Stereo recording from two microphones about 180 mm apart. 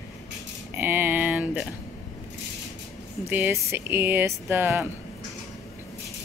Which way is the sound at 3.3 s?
10° right (ahead or behind).